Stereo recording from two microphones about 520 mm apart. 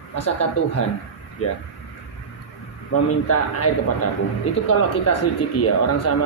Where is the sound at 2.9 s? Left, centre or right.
Left.